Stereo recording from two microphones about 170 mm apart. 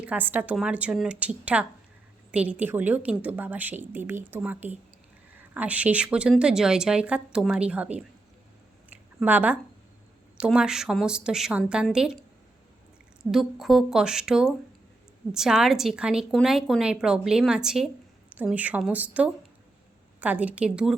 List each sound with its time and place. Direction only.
0.0 s a woman's voice: 10° right (ahead or behind)
8.9 s a sound: 10° right (ahead or behind)
10.3 s a woman's voice: 5° right (ahead or behind)
13.3 s a woman's voice: centre (ahead or behind)